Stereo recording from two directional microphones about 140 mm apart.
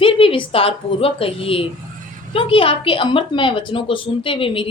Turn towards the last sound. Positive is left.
turn(degrees=40)  # may be behind; listen again after turning